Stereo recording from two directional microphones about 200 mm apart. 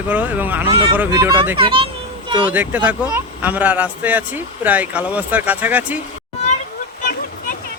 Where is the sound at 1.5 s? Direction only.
25° right (ahead or behind).